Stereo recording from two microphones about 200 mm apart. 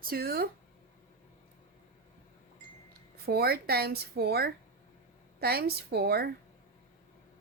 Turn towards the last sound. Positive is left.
turn(degrees=-50)  # may be behind; listen again after turning